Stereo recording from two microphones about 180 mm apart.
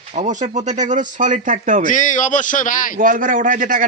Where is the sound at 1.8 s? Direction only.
45° left (ahead or behind).